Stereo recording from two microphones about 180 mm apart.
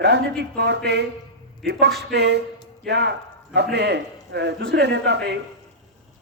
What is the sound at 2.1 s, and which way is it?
Speech, 70° right (ahead or behind).